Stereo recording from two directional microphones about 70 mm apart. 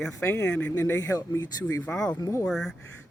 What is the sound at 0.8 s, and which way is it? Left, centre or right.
Speech, left.